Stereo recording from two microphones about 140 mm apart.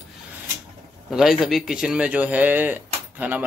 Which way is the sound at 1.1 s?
5° right (ahead or behind).